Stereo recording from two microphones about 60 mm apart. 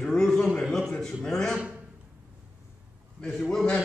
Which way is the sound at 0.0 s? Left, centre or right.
Centre.